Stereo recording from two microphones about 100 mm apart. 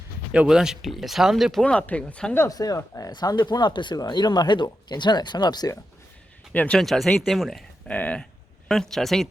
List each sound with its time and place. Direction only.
0.3 s speech: 10° right (ahead or behind)
1.6 s speech: 10° left (ahead or behind)
2.5 s speech: 40° left (ahead or behind)
6.5 s speech: 15° left (ahead or behind)
6.7 s speech: centre (ahead or behind)
7.9 s speech: 15° left (ahead or behind)